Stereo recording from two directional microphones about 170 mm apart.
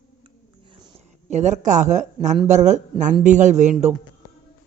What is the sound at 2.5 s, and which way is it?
Speech, 45° right (ahead or behind).